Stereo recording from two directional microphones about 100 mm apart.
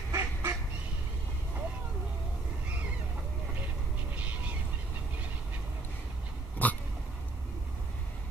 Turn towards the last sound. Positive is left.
turn(degrees=15)  # may be behind; listen again after turning